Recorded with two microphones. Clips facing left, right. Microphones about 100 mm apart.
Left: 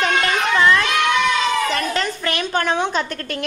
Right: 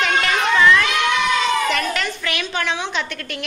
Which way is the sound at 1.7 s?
35° left (ahead or behind).